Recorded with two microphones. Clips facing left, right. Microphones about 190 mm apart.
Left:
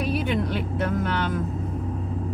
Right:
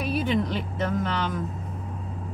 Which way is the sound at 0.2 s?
55° left (ahead or behind).